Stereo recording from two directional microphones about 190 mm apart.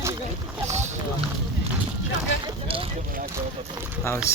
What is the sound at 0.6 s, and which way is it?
Rowboat, 35° right (ahead or behind).